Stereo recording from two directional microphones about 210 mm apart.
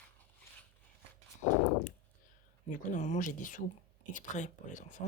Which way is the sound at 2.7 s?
35° left (ahead or behind).